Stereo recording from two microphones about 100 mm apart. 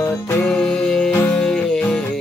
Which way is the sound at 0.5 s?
10° left (ahead or behind).